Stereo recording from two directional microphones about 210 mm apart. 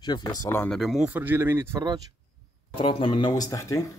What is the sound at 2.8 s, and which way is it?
Speech, 25° left (ahead or behind).